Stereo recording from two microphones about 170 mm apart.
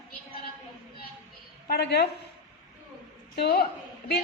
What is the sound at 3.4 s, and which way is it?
Speech, 70° left (ahead or behind).